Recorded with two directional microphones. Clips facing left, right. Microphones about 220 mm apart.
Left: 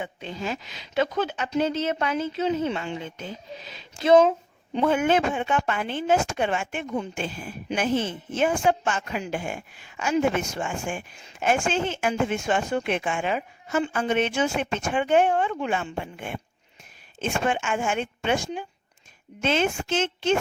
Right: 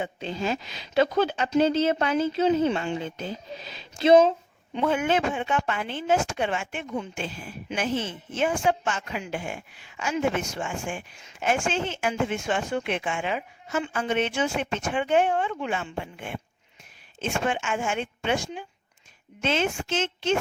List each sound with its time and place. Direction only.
0.0 s speech: 30° right (ahead or behind)
4.9 s speech: 50° left (ahead or behind)